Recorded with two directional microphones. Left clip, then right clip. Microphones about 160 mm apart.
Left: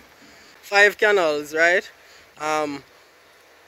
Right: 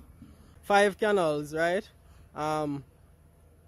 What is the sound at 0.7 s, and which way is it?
Speech, 20° right (ahead or behind).